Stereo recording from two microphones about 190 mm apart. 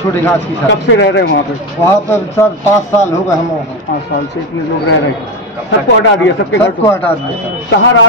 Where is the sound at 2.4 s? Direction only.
15° left (ahead or behind).